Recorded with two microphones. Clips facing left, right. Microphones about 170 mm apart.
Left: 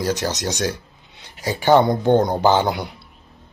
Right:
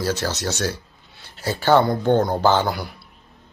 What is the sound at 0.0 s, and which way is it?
Speech, 15° left (ahead or behind).